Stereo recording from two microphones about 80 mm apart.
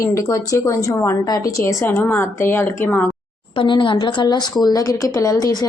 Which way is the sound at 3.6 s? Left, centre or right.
Left.